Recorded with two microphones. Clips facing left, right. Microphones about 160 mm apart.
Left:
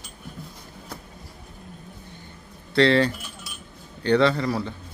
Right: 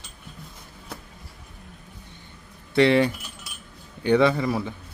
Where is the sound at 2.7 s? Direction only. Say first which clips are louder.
Even; 15° right (ahead or behind).